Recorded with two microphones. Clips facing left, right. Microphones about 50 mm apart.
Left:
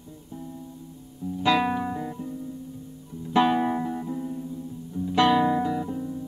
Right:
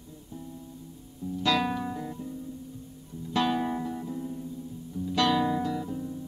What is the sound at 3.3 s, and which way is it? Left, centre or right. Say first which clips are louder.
Music: left 6 dB; centre.